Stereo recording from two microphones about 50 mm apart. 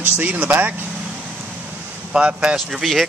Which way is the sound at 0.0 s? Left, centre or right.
Right.